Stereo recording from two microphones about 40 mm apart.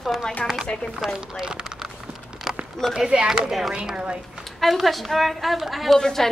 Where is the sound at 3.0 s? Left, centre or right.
Centre.